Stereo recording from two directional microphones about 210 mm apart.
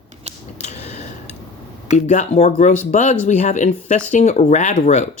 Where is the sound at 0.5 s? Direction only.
30° left (ahead or behind).